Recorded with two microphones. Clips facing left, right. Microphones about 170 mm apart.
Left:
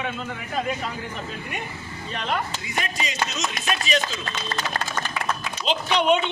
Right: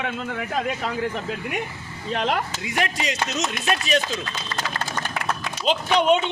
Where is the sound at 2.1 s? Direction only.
90° right; by 3.4 s 75° right (ahead or behind).